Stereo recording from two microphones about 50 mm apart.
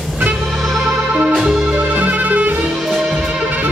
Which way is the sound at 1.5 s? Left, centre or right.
Centre.